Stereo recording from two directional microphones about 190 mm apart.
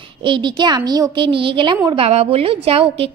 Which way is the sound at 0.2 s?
25° right (ahead or behind).